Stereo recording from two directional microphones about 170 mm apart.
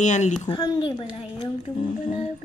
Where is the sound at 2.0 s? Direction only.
50° left (ahead or behind).